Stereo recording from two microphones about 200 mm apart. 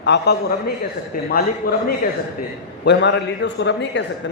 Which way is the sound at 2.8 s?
60° left (ahead or behind).